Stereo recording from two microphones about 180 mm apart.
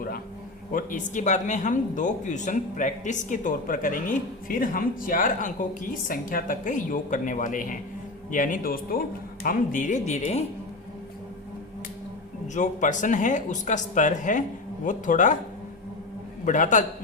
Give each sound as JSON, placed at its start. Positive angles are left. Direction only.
{"t": 0.7, "sound": "speech", "side_deg": 50}
{"t": 12.5, "sound": "speech", "side_deg": 45}
{"t": 16.5, "sound": "speech", "side_deg": 45}